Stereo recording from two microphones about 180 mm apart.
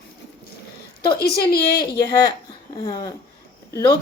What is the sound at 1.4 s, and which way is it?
Speech, 60° left (ahead or behind).